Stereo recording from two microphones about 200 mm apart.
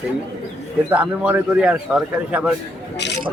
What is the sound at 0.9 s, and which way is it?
A man's voice, 5° right (ahead or behind).